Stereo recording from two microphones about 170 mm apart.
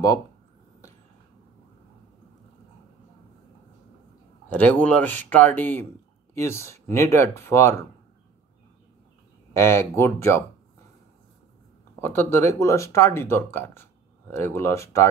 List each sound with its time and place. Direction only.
4.5 s speech: 10° left (ahead or behind)
9.5 s speech: 15° left (ahead or behind)
12.0 s speech: 15° left (ahead or behind)